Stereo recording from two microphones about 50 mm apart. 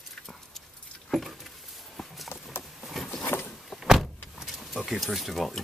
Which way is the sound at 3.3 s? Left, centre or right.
Left.